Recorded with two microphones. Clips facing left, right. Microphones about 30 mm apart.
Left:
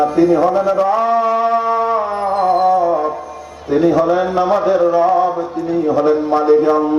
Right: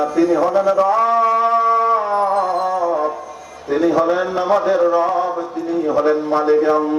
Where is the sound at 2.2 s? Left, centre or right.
Left.